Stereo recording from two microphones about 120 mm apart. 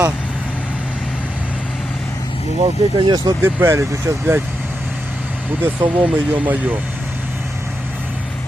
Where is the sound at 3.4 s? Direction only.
20° right (ahead or behind).